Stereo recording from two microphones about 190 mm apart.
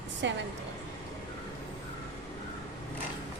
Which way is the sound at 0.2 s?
70° right (ahead or behind).